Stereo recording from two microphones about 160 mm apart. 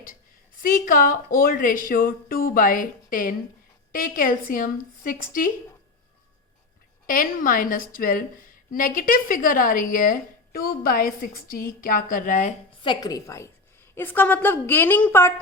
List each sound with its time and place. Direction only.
0.6 s a woman's voice: 60° left (ahead or behind)
7.1 s a woman's voice: 60° left (ahead or behind)
12.8 s a woman's voice: 25° left (ahead or behind)